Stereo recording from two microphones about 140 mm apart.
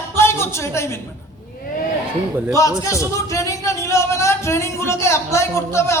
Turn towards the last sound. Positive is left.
turn(degrees=20)  # may be behind; listen again after turning